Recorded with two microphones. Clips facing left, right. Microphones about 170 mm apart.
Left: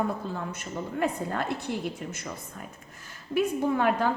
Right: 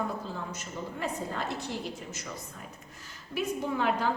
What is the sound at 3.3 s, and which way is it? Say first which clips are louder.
Speech: left 6 dB; 50° left (ahead or behind).